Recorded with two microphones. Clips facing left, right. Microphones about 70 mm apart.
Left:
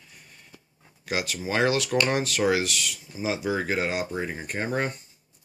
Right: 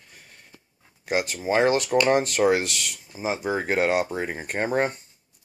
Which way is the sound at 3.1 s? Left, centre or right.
Right.